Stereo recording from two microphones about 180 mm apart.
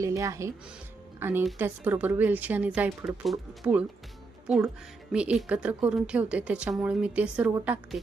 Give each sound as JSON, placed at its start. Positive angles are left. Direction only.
{"t": 0.0, "sound": "speech", "side_deg": -15}